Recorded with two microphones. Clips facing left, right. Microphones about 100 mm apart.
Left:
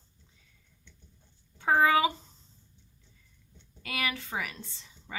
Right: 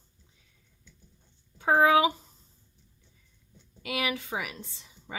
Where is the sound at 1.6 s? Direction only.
15° right (ahead or behind).